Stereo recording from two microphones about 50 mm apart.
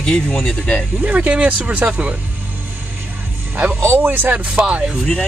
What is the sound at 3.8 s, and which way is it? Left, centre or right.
Speech, right.